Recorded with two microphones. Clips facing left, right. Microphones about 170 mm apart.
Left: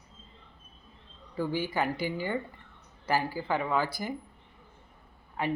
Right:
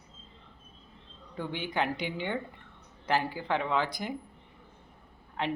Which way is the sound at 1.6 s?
5° left (ahead or behind).